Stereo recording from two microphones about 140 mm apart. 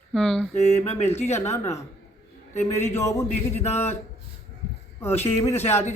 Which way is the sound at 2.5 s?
55° left (ahead or behind).